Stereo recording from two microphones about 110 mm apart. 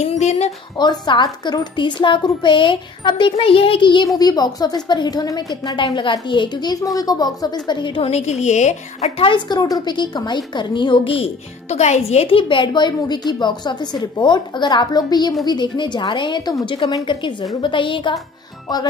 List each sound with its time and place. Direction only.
0.0 s a sound: 90° left
0.7 s a woman's voice: 40° left (ahead or behind)
6.1 s a woman's voice: 45° left (ahead or behind)
8.1 s a woman's voice: 90° left
9.2 s a woman's voice: 50° left (ahead or behind)
9.6 s a woman's voice: 35° left (ahead or behind)